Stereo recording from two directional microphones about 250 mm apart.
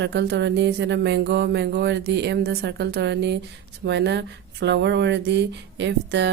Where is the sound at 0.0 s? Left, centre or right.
Right.